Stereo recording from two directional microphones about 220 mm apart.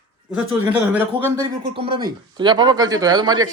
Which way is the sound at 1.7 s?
25° right (ahead or behind).